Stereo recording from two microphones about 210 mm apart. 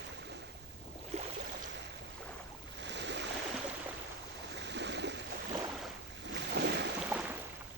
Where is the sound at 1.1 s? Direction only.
30° right (ahead or behind).